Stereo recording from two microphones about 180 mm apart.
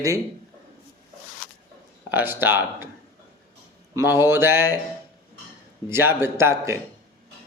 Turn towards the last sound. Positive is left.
turn(degrees=-15)  # may be behind; listen again after turning